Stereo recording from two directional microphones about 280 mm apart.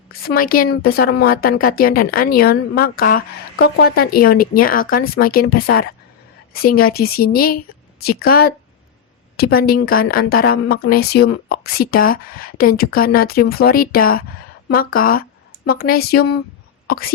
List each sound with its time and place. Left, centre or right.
0.1 s a woman's voice: left